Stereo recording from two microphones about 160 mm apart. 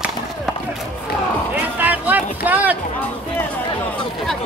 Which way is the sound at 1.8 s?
10° right (ahead or behind).